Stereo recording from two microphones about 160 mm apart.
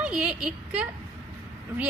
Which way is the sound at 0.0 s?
5° right (ahead or behind).